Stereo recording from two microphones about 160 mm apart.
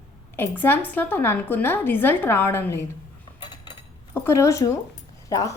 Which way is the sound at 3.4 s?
25° left (ahead or behind).